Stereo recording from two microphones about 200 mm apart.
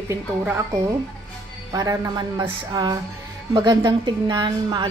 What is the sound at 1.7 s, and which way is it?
A woman's voice, 20° right (ahead or behind).